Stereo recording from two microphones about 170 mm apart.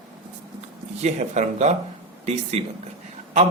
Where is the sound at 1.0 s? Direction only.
45° right (ahead or behind).